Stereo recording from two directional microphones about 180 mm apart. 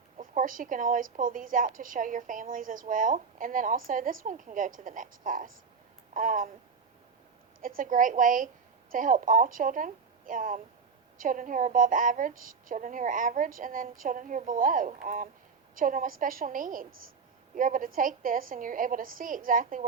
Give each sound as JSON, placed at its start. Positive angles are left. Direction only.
{"t": 0.2, "sound": "a woman's voice", "side_deg": -50}
{"t": 7.8, "sound": "a woman's voice", "side_deg": -45}